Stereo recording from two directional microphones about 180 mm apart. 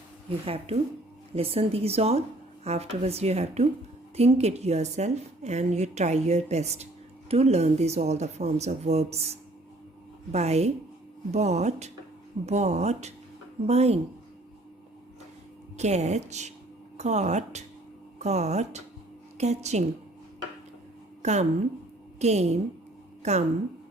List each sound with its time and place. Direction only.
0.3 s a woman's voice: 30° right (ahead or behind)
15.8 s a woman's voice: 40° right (ahead or behind)
21.2 s a woman's voice: 40° right (ahead or behind)